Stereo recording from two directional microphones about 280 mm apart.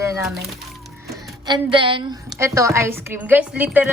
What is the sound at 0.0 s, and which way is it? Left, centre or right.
Music, centre.